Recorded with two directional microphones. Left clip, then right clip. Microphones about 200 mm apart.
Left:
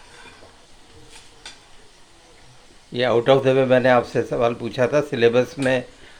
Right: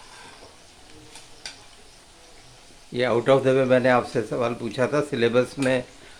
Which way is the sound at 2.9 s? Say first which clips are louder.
Left 3 dB; centre (ahead or behind).